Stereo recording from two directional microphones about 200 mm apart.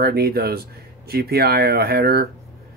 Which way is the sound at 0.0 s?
50° right (ahead or behind).